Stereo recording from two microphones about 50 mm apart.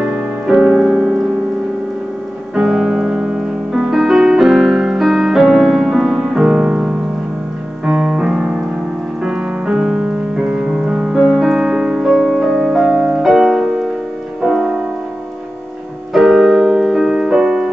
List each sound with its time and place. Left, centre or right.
0.5 s keyboard: centre
2.5 s music: centre
6.4 s music: right
11.2 s music: centre
12.1 s music: centre
16.1 s music: centre